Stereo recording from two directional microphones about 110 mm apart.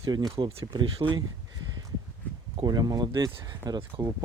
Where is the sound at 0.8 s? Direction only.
50° right (ahead or behind).